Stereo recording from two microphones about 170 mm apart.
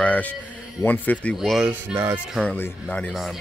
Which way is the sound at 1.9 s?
15° right (ahead or behind).